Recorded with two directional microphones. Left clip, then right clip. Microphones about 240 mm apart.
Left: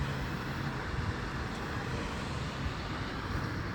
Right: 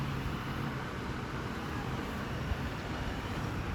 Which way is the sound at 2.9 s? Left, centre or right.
Right.